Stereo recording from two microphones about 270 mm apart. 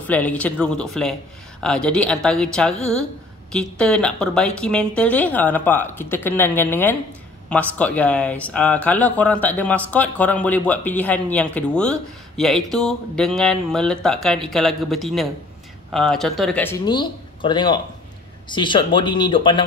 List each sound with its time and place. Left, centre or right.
0.0 s speech: centre